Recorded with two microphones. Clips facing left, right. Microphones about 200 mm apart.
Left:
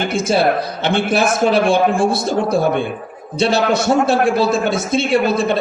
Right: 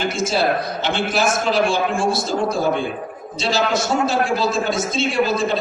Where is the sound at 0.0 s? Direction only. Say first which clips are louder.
Left 4 dB; 60° left (ahead or behind).